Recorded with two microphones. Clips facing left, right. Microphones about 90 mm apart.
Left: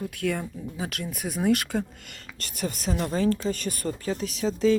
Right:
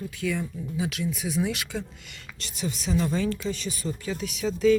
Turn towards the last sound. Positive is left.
turn(degrees=30)  # may be behind; listen again after turning